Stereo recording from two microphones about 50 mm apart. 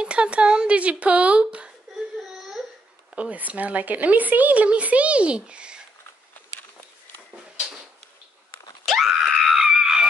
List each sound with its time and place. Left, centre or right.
0.0 s speech: right
3.2 s speech: right
8.8 s screaming: centre